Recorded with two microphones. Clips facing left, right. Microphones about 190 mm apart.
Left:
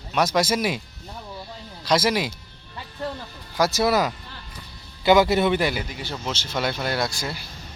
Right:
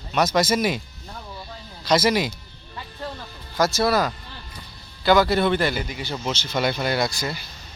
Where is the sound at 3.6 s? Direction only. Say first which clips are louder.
Even; 15° left (ahead or behind).